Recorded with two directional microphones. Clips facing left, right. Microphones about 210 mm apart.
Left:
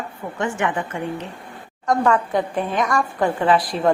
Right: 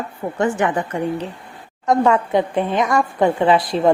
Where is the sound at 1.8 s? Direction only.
25° right (ahead or behind).